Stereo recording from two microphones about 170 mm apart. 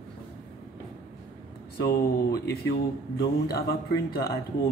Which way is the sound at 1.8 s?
65° left (ahead or behind).